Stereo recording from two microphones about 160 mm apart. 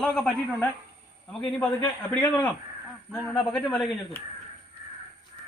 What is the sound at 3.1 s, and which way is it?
Speech, centre (ahead or behind).